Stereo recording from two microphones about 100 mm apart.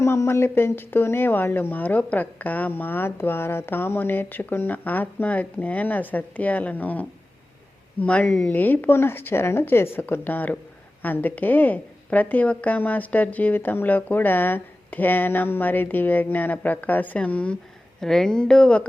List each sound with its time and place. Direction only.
0.0 s speech: 30° left (ahead or behind); by 18.9 s 10° left (ahead or behind)